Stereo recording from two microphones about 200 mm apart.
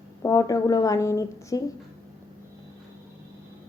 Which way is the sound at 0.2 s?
15° left (ahead or behind).